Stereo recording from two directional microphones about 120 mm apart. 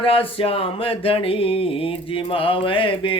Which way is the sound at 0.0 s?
50° left (ahead or behind).